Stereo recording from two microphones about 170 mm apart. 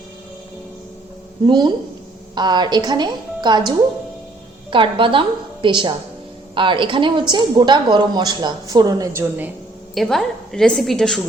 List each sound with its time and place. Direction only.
1.5 s a woman's voice: 25° right (ahead or behind)
4.7 s a woman's voice: 30° right (ahead or behind)
9.9 s a woman's voice: centre (ahead or behind)